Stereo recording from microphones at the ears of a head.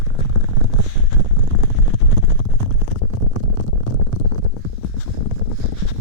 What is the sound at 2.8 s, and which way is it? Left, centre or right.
Stomach rumble, left.